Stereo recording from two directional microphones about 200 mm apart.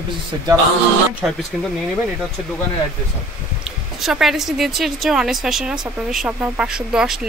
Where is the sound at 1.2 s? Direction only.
5° right (ahead or behind).